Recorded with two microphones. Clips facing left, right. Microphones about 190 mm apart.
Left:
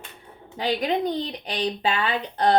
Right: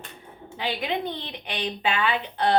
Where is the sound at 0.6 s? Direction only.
40° left (ahead or behind).